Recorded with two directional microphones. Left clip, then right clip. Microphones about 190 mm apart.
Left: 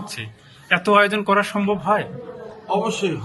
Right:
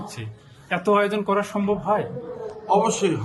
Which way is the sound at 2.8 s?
25° right (ahead or behind).